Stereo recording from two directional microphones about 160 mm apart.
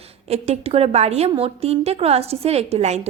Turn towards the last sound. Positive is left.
turn(degrees=-45)  # may be behind; listen again after turning